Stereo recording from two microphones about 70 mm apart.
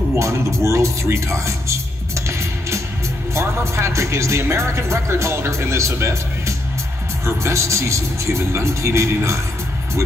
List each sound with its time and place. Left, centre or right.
0.1 s music: right
3.3 s speech: right